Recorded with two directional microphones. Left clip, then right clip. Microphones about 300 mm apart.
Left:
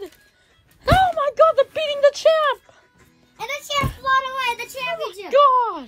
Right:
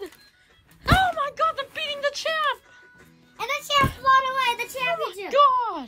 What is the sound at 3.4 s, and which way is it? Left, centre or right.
Music, centre.